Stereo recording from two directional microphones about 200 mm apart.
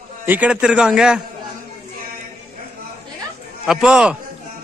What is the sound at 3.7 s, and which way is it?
Speech, 5° right (ahead or behind).